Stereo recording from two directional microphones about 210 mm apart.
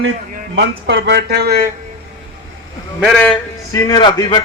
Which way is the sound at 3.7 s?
15° left (ahead or behind).